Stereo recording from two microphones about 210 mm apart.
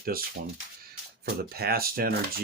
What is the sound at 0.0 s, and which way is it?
Speech, 45° right (ahead or behind).